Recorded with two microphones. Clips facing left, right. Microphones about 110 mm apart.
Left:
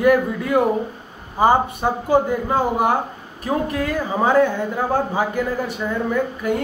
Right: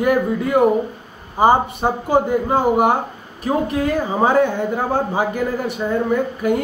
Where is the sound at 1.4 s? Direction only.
20° right (ahead or behind).